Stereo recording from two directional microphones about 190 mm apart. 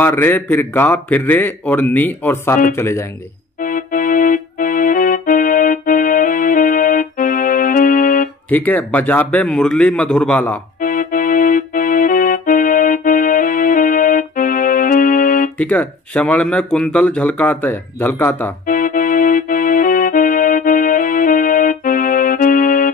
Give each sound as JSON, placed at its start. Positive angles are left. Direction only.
{"t": 0.0, "sound": "speech", "side_deg": 10}
{"t": 3.6, "sound": "music", "side_deg": 45}
{"t": 8.5, "sound": "speech", "side_deg": 10}
{"t": 10.8, "sound": "music", "side_deg": 45}
{"t": 15.5, "sound": "speech", "side_deg": 10}
{"t": 18.7, "sound": "music", "side_deg": 45}